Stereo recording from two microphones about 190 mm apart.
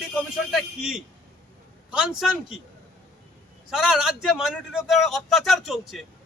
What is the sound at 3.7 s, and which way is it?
Speech, centre (ahead or behind).